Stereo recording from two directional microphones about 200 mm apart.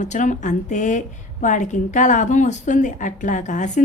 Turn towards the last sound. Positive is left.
turn(degrees=40)  # may be behind; listen again after turning